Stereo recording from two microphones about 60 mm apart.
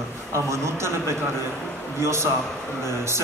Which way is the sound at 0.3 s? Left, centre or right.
Right.